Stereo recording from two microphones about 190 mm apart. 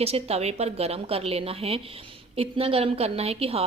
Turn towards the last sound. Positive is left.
turn(degrees=-30)  # may be behind; listen again after turning